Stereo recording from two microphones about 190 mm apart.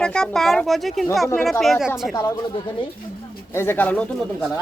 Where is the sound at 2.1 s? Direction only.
20° left (ahead or behind).